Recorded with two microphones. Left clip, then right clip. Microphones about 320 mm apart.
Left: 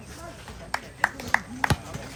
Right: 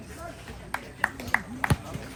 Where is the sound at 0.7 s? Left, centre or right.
Left.